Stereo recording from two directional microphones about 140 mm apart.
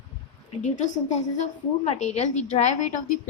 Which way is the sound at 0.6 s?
60° left (ahead or behind).